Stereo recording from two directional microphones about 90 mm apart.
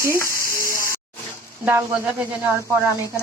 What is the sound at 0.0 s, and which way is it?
Sizzle, 30° left (ahead or behind).